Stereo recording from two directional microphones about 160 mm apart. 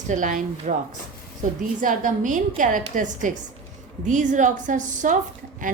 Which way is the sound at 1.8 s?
55° right (ahead or behind).